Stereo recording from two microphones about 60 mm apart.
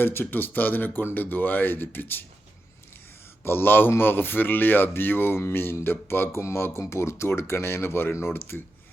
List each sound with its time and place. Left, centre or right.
0.0 s a man's voice: left
3.4 s a man's voice: left